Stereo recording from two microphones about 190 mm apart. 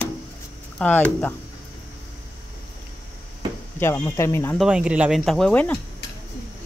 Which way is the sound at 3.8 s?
15° left (ahead or behind).